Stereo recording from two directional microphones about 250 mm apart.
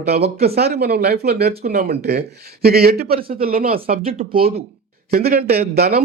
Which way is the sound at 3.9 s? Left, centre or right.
Right.